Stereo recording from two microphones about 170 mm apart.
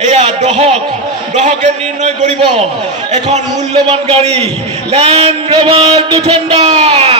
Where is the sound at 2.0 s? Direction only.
45° right (ahead or behind).